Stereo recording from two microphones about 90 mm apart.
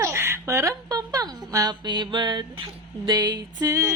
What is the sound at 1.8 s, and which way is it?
Mantra, 55° right (ahead or behind).